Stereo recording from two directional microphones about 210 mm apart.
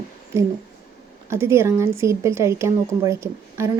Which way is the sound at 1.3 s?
10° right (ahead or behind).